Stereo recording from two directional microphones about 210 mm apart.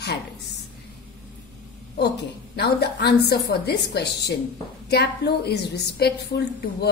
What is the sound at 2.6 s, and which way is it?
A woman's voice, 50° left (ahead or behind).